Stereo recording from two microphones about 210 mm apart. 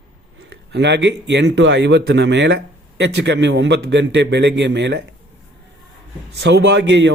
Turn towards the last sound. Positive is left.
turn(degrees=-55)  # may be behind; listen again after turning